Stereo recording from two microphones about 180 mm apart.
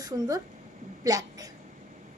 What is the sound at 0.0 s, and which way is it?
A child's voice, 20° right (ahead or behind).